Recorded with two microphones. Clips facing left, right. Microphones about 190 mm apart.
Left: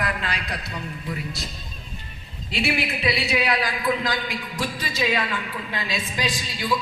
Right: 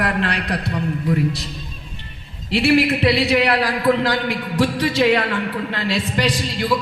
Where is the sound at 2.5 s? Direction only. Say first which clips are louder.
Right 10 dB; 65° right (ahead or behind).